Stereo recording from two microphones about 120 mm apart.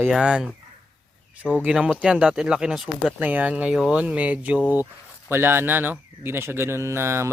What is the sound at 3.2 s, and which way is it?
A man's voice, 15° right (ahead or behind).